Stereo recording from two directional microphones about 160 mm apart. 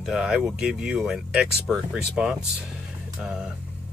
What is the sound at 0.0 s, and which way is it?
Speech, centre (ahead or behind).